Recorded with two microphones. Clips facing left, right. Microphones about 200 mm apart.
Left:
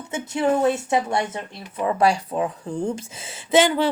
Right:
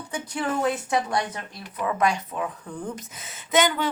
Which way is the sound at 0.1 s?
25° left (ahead or behind).